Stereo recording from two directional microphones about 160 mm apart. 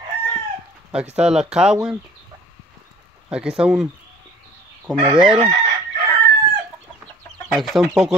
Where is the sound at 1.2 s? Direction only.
5° right (ahead or behind).